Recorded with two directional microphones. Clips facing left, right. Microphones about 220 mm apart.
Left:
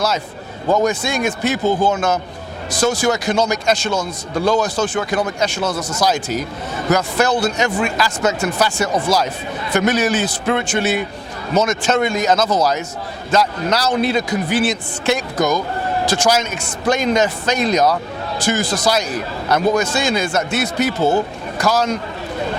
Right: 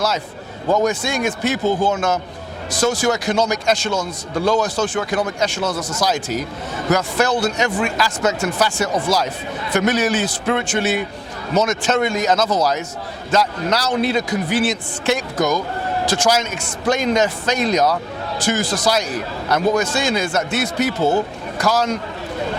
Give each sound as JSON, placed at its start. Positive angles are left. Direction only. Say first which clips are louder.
{"t": 0.7, "sound": "a man's voice", "louder": "left 1 dB", "side_deg": 25}
{"t": 3.9, "sound": "speech", "louder": "left 1 dB", "side_deg": 25}
{"t": 6.0, "sound": "a man's voice", "louder": "left 2 dB", "side_deg": 10}
{"t": 12.5, "sound": "speech", "louder": "left 1 dB", "side_deg": 30}
{"t": 13.3, "sound": "a man's voice", "louder": "left 1 dB", "side_deg": 15}
{"t": 18.3, "sound": "a man's voice", "louder": "left 1 dB", "side_deg": 10}